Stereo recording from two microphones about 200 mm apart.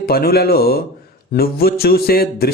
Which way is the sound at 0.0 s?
50° left (ahead or behind).